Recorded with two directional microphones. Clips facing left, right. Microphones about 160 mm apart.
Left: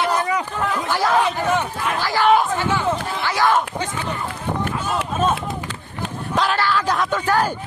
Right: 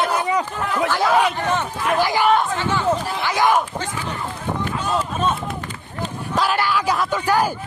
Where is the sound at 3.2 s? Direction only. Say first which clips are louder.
Left 1 dB; 15° right (ahead or behind).